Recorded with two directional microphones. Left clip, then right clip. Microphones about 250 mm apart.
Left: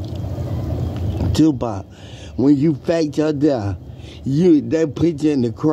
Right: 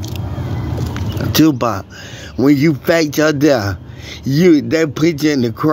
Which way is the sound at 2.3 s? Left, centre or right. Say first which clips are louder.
Right 3 dB; centre.